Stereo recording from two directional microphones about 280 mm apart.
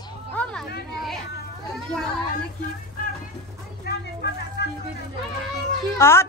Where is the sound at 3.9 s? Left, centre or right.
Left.